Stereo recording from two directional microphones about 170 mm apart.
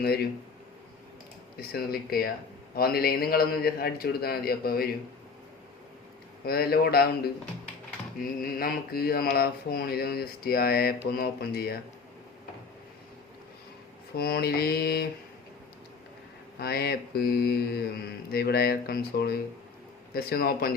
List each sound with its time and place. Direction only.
1.5 s speech: 65° left (ahead or behind)
6.4 s speech: 65° left (ahead or behind)
14.2 s speech: 65° left (ahead or behind)
16.6 s speech: 70° left (ahead or behind)